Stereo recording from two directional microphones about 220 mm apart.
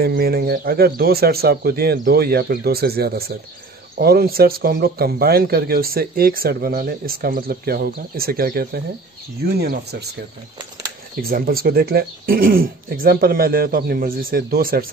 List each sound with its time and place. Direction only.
0.0 s speech: 45° right (ahead or behind)
11.1 s speech: 45° right (ahead or behind)